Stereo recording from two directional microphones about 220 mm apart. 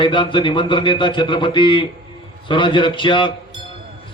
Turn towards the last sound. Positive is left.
turn(degrees=20)  # may be behind; listen again after turning